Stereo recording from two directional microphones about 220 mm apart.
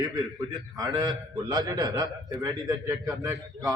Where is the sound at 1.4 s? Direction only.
15° right (ahead or behind).